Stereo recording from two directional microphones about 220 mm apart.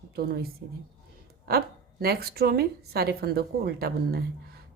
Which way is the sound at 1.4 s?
45° right (ahead or behind).